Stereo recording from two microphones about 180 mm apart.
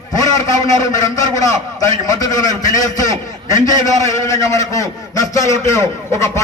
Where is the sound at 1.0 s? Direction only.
20° left (ahead or behind).